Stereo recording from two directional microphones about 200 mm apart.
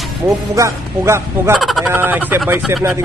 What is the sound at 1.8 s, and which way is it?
Speech, 10° right (ahead or behind).